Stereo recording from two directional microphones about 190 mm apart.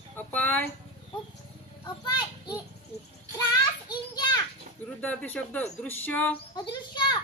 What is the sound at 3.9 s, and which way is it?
Children playing, 20° left (ahead or behind).